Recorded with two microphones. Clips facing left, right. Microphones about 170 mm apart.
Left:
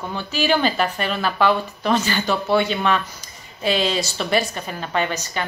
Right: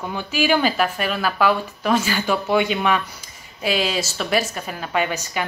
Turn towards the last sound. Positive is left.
turn(degrees=-10)  # may be behind; listen again after turning